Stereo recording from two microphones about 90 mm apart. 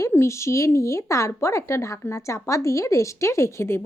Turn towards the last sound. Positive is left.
turn(degrees=30)  # may be behind; listen again after turning